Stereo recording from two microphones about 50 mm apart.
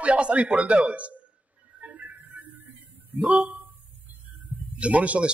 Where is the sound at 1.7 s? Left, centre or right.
Right.